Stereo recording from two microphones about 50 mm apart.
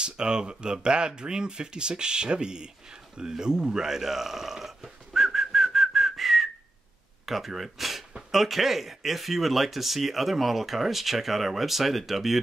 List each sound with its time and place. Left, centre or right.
0.0 s speech: centre
3.2 s a sound: centre
7.2 s speech: centre